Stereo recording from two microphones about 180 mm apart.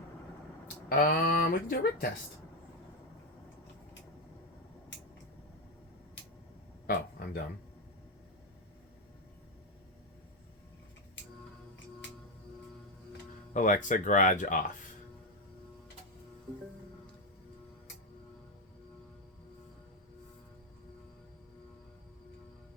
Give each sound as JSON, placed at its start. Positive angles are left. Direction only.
{"t": 0.9, "sound": "speech", "side_deg": 55}
{"t": 6.8, "sound": "a sound", "side_deg": 55}
{"t": 13.5, "sound": "speech", "side_deg": 45}